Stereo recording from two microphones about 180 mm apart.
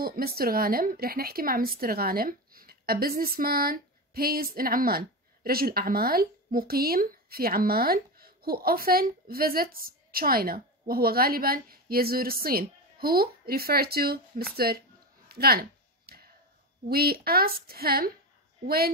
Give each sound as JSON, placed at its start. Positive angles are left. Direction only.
{"t": 0.0, "sound": "a woman's voice", "side_deg": -55}
{"t": 15.2, "sound": "a sound", "side_deg": -60}
{"t": 16.9, "sound": "a woman's voice", "side_deg": -60}